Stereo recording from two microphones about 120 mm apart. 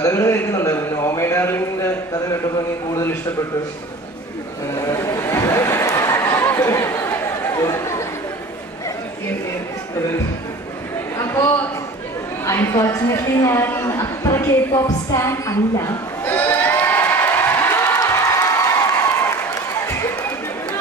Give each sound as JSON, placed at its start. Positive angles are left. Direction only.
{"t": 0.0, "sound": "a man's voice", "side_deg": 25}
{"t": 2.9, "sound": "a man's voice", "side_deg": 25}
{"t": 4.7, "sound": "chatter", "side_deg": 25}
{"t": 11.1, "sound": "a sound", "side_deg": 25}
{"t": 12.4, "sound": "a woman's voice", "side_deg": 20}
{"t": 16.3, "sound": "crowd", "side_deg": 15}